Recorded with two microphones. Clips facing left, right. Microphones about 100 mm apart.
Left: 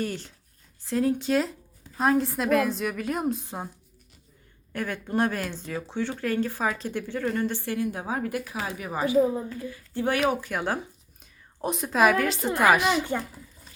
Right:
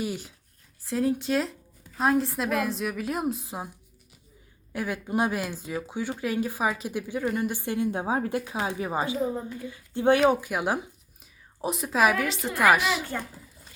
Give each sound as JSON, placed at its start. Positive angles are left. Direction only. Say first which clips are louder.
{"t": 0.0, "sound": "a woman's voice", "louder": "left 1 dB", "side_deg": -10}
{"t": 4.7, "sound": "speech", "louder": "even", "side_deg": -10}
{"t": 10.5, "sound": "a woman's voice", "louder": "right 1 dB", "side_deg": -10}